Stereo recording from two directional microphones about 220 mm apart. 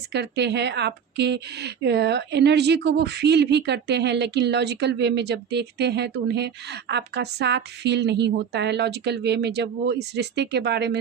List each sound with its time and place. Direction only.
0.1 s a woman's voice: 50° right (ahead or behind)